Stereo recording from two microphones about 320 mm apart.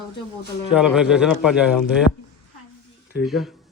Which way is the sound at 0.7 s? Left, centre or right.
Centre.